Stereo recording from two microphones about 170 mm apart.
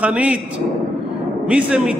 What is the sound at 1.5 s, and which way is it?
Speech, 5° right (ahead or behind).